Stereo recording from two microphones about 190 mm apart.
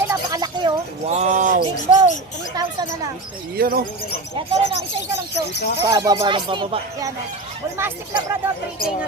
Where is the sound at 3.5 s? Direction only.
55° right (ahead or behind).